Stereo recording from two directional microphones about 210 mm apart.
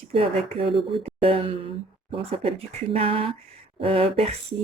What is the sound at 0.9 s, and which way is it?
Speech, 25° right (ahead or behind).